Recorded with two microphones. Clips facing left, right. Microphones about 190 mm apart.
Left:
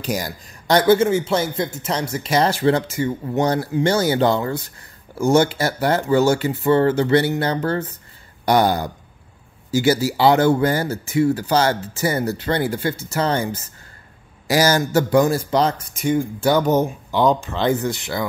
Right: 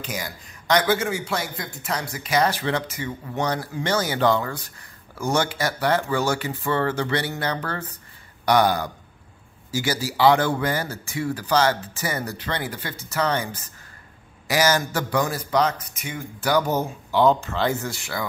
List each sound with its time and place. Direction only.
0.0 s a man's voice: 40° left (ahead or behind); by 18.2 s 20° left (ahead or behind)